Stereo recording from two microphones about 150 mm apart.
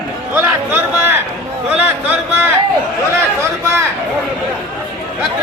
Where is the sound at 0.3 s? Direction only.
15° right (ahead or behind).